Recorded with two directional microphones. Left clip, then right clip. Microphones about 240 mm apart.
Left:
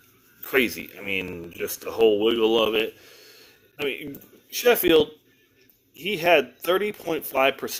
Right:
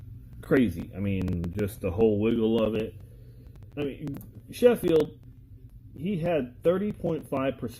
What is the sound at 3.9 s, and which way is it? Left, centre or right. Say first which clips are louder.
Speech: left 6 dB; left.